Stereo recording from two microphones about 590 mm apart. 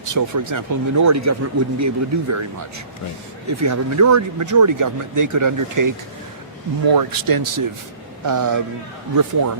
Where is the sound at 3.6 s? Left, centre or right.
Right.